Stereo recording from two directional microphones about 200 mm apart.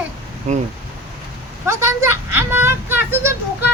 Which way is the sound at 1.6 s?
15° right (ahead or behind).